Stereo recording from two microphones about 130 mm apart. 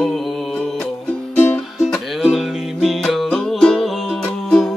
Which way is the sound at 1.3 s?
15° left (ahead or behind).